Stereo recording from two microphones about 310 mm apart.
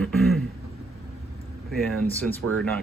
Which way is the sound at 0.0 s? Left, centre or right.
Centre.